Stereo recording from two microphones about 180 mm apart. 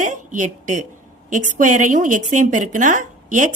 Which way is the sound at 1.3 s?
45° right (ahead or behind).